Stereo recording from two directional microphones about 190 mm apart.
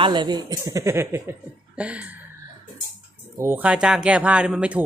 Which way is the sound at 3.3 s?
15° right (ahead or behind).